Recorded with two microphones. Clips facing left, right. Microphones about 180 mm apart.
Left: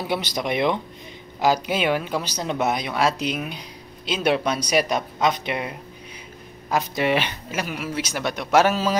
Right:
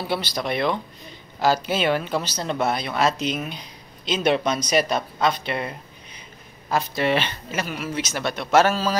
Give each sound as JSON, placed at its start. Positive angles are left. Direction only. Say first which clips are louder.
{"t": 0.0, "sound": "speech", "louder": "left 1 dB", "side_deg": 20}